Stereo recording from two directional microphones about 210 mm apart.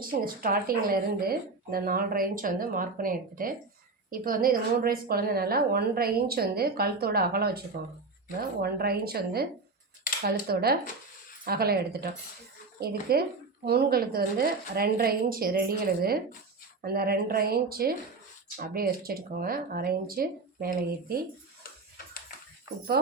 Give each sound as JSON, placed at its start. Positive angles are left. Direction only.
{"t": 0.3, "sound": "a woman's voice", "side_deg": -45}